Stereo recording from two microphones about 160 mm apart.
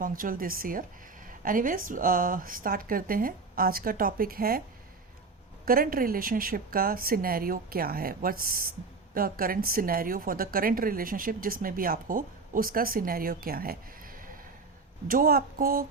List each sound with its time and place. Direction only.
0.0 s a woman's voice: 60° right (ahead or behind)
5.6 s a woman's voice: 65° right (ahead or behind)